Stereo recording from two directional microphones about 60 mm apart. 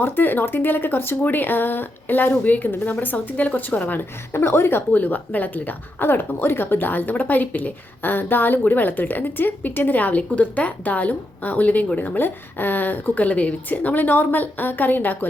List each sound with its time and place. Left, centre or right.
0.0 s a woman's voice: left
4.9 s a woman's voice: left